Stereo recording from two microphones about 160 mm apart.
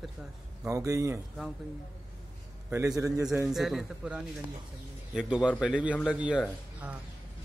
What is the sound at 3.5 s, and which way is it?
A man's voice, centre (ahead or behind).